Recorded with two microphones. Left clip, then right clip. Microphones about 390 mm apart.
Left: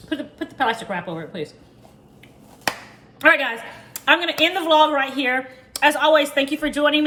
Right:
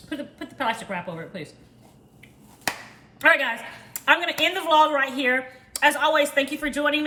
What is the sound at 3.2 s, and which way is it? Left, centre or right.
A woman's voice, centre.